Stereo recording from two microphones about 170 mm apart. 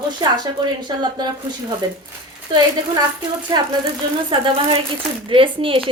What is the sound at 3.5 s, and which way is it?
A woman's voice, 25° right (ahead or behind).